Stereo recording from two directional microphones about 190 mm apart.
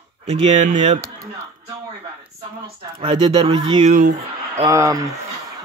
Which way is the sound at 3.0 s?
30° right (ahead or behind).